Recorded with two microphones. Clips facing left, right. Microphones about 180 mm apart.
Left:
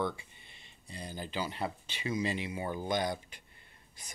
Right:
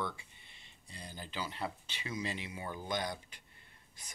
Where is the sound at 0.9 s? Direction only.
15° left (ahead or behind).